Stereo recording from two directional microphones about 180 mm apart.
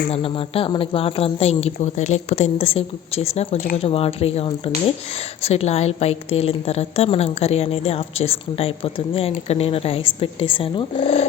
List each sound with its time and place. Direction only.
0.1 s a woman's voice: 30° left (ahead or behind)